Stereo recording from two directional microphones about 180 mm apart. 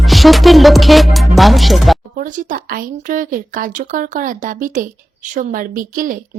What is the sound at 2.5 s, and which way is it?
Speech, 50° right (ahead or behind).